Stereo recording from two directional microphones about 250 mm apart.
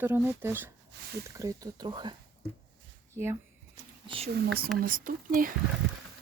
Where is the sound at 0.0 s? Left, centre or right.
Centre.